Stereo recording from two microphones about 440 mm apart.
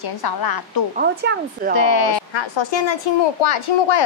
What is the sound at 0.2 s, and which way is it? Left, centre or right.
Speech, left.